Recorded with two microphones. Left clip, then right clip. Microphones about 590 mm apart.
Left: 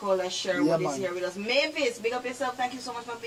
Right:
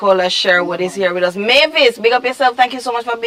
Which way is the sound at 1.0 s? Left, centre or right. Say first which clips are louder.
Right 16 dB; right.